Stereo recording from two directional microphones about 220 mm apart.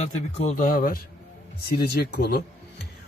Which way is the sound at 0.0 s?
30° left (ahead or behind).